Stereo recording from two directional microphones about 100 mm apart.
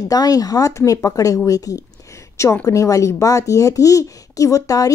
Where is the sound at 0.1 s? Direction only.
40° left (ahead or behind).